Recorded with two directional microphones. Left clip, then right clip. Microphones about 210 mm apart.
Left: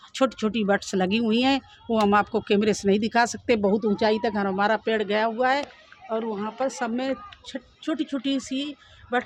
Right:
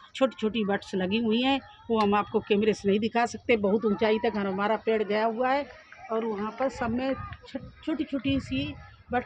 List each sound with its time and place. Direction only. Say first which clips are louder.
0.1 s speech: left 2 dB; 40° left (ahead or behind); by 5.6 s 20° left (ahead or behind)
6.7 s speech: left 2 dB; 25° left (ahead or behind)